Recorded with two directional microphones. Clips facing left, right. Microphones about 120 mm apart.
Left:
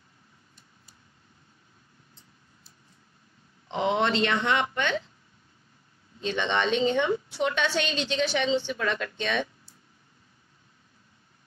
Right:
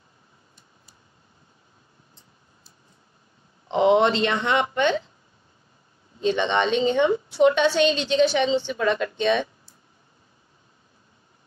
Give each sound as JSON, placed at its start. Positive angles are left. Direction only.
{"t": 3.6, "sound": "speech", "side_deg": -20}
{"t": 6.2, "sound": "a woman's voice", "side_deg": -25}